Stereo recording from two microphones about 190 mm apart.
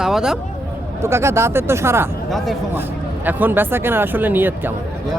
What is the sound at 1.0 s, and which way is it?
Speech, 15° right (ahead or behind).